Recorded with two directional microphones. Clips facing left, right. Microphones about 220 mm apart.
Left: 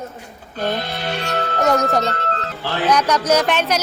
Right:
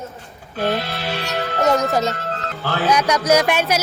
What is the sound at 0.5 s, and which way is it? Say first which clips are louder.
A woman's voice: right 1 dB; centre (ahead or behind).